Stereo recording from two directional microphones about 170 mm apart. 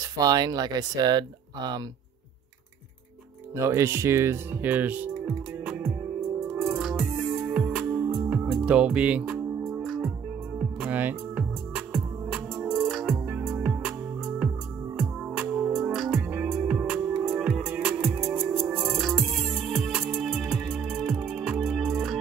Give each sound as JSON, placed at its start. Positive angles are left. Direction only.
{"t": 0.0, "sound": "speech", "side_deg": -20}
{"t": 3.5, "sound": "speech", "side_deg": -15}
{"t": 6.4, "sound": "music", "side_deg": 0}
{"t": 15.0, "sound": "music", "side_deg": -5}